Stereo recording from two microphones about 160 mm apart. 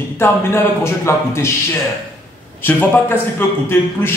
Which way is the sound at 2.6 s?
10° left (ahead or behind).